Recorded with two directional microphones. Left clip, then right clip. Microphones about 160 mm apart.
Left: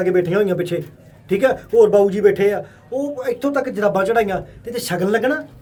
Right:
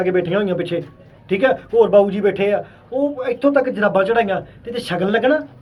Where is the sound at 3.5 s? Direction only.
15° left (ahead or behind).